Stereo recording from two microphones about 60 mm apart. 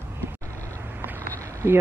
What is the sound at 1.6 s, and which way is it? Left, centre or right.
Speech, right.